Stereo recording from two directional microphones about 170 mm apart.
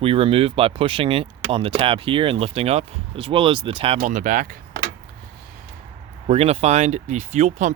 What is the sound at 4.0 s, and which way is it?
Speech, 50° right (ahead or behind).